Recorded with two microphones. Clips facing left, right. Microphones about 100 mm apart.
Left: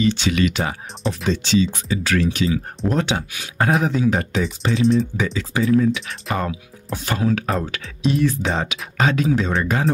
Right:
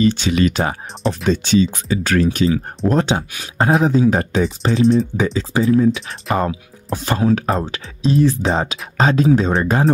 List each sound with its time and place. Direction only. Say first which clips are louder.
0.0 s speech: right 3 dB; 40° right (ahead or behind)
1.2 s speech: right 3 dB; 50° right (ahead or behind); by 9.8 s 35° right (ahead or behind)